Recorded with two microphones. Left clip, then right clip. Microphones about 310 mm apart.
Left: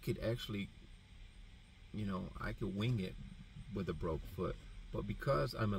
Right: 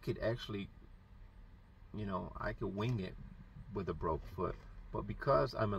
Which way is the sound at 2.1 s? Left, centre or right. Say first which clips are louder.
Right 5 dB; right.